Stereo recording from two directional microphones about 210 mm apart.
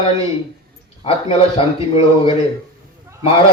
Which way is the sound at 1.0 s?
25° left (ahead or behind).